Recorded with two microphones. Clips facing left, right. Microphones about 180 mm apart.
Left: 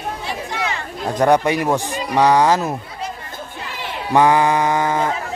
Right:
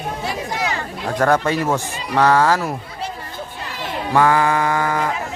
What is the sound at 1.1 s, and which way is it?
Speech, 15° left (ahead or behind).